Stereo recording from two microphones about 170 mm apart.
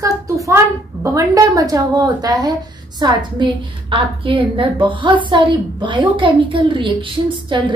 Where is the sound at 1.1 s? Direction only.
20° right (ahead or behind).